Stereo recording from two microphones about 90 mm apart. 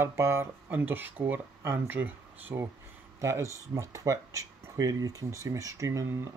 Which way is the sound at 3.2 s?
35° right (ahead or behind).